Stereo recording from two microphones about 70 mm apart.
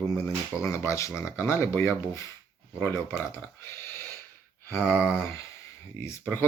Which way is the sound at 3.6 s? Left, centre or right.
Left.